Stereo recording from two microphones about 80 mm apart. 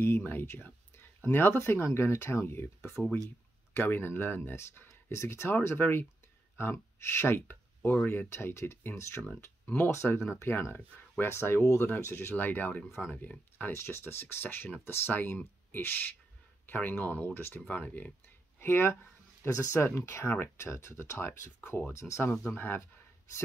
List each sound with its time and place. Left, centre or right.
0.0 s speech: left
13.7 s speech: left
18.6 s speech: left
21.5 s speech: left
21.9 s speech: left